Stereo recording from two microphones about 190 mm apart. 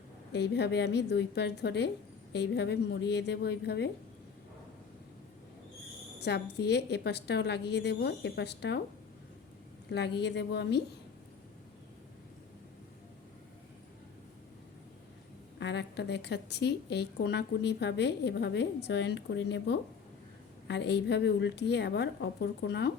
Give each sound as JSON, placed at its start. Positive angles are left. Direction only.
{"t": 0.3, "sound": "a woman's voice", "side_deg": 60}
{"t": 6.1, "sound": "a woman's voice", "side_deg": 60}
{"t": 10.2, "sound": "a woman's voice", "side_deg": 65}
{"t": 15.5, "sound": "a woman's voice", "side_deg": 65}